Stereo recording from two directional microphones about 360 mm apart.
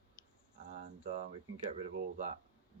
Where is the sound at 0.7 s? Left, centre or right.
Centre.